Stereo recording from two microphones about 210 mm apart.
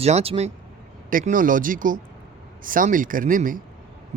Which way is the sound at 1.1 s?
40° right (ahead or behind).